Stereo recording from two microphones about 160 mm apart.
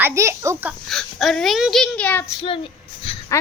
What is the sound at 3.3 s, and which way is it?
Speech, 15° left (ahead or behind).